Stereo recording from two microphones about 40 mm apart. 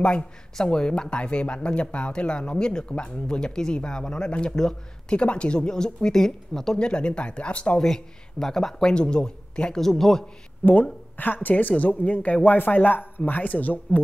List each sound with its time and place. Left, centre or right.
0.6 s speech: centre
5.1 s speech: left; by 6.8 s centre
6.8 s speech: left
7.8 s speech: centre
8.9 s speech: left
9.8 s speech: centre
10.6 s speech: left
12.4 s speech: left